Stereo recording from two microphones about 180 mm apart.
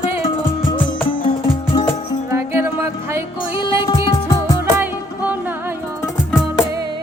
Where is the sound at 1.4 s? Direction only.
30° left (ahead or behind).